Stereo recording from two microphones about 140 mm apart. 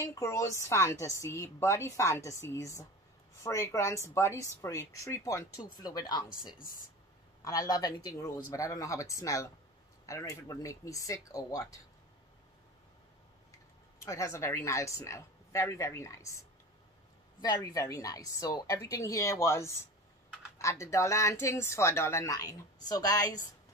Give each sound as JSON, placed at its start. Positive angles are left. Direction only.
{"t": 0.0, "sound": "a woman's voice", "side_deg": 20}
{"t": 7.4, "sound": "a woman's voice", "side_deg": 25}
{"t": 13.9, "sound": "a woman's voice", "side_deg": 20}
{"t": 17.4, "sound": "a woman's voice", "side_deg": 25}